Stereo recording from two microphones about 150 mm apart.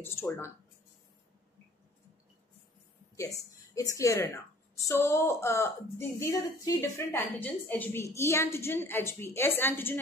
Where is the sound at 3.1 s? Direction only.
20° left (ahead or behind).